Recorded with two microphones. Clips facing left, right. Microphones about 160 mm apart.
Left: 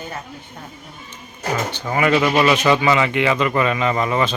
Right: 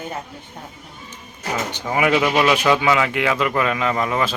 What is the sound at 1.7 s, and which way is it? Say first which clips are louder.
A woman's voice: even; 10° right (ahead or behind).